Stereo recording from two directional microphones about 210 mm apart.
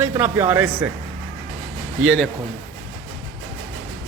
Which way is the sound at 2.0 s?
Centre (ahead or behind).